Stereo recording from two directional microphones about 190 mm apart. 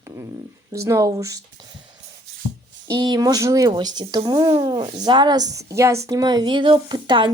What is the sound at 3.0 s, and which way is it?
A woman's voice, 20° right (ahead or behind).